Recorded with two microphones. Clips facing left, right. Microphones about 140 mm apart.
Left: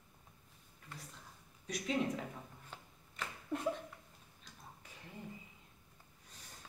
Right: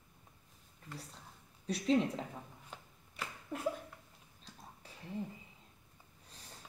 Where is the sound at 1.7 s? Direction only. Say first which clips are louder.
Right 4 dB; 35° right (ahead or behind).